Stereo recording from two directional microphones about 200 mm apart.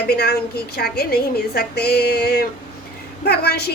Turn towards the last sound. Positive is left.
turn(degrees=50)  # may be behind; listen again after turning